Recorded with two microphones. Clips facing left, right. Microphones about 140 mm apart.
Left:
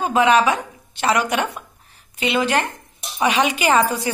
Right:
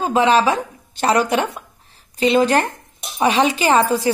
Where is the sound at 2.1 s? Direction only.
35° right (ahead or behind).